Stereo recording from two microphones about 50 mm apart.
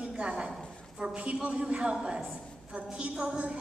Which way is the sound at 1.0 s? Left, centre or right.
Right.